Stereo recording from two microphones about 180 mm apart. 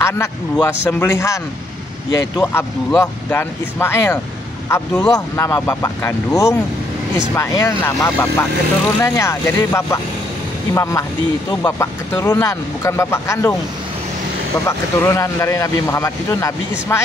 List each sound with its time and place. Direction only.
0.0 s speech: 15° left (ahead or behind)
14.7 s speech: 15° left (ahead or behind)